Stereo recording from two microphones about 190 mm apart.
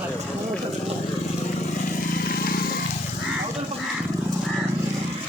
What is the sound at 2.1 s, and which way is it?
Vehicle, 50° left (ahead or behind).